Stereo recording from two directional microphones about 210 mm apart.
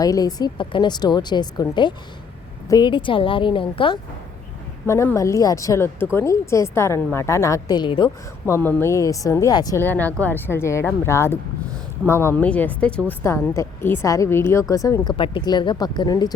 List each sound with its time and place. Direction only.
0.0 s speech: 15° left (ahead or behind)
4.9 s speech: 15° left (ahead or behind)
8.5 s speech: 10° left (ahead or behind)